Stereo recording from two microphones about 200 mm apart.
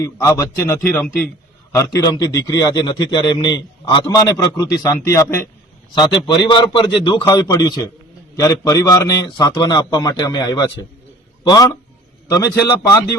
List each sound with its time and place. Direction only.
0.0 s a man's voice: 15° left (ahead or behind)